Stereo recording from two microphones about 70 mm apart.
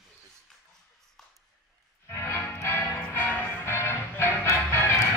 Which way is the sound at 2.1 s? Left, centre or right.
Left.